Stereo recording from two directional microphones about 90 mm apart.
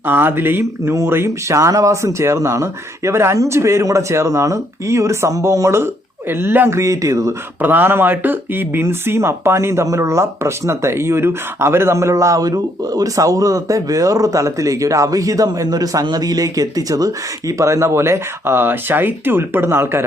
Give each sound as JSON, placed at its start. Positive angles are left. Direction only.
{"t": 0.0, "sound": "speech", "side_deg": -25}
{"t": 6.7, "sound": "speech", "side_deg": -35}
{"t": 7.6, "sound": "speech", "side_deg": -20}